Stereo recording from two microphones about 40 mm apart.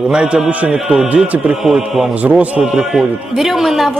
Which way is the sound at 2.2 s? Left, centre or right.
Right.